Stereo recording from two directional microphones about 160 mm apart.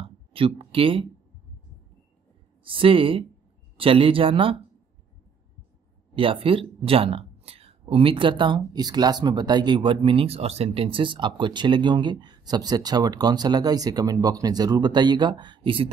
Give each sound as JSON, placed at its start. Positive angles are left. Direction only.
{"t": 0.0, "sound": "a sound", "side_deg": -35}
{"t": 2.6, "sound": "speech", "side_deg": -35}
{"t": 6.1, "sound": "speech", "side_deg": -35}